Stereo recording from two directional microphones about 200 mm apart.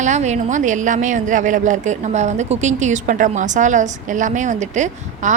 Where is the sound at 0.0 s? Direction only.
35° right (ahead or behind).